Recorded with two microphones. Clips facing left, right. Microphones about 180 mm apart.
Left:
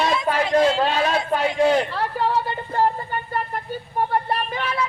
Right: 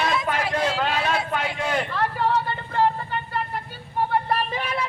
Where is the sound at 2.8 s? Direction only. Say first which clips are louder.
Even; 45° left (ahead or behind).